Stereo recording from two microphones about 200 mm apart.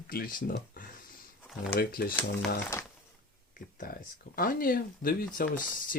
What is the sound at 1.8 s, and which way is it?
Speech, 50° left (ahead or behind).